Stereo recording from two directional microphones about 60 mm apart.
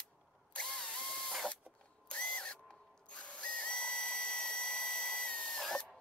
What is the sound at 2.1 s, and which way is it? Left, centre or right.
Tools, centre.